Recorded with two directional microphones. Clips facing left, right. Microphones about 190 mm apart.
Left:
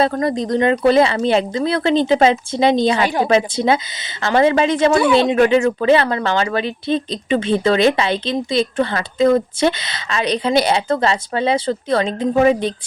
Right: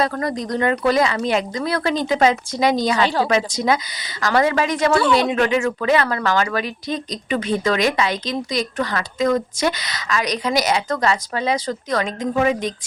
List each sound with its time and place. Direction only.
0.0 s speech: 25° left (ahead or behind)
3.0 s a woman's voice: 15° left (ahead or behind)
3.2 s speech: 30° left (ahead or behind)